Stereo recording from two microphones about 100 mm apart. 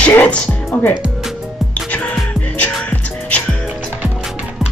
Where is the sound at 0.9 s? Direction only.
10° right (ahead or behind).